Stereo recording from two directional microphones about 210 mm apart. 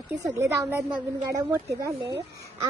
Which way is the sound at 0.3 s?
10° right (ahead or behind).